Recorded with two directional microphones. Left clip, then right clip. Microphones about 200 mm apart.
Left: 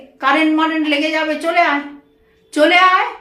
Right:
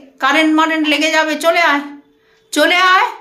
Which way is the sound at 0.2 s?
20° right (ahead or behind).